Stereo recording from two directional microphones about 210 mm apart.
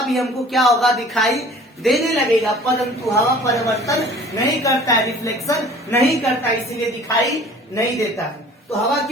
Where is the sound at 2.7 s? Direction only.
15° left (ahead or behind).